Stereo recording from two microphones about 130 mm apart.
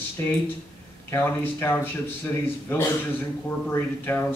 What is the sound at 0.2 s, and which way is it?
Speech, 20° left (ahead or behind).